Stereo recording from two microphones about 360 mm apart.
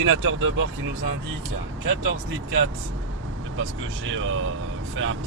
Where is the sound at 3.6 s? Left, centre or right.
Right.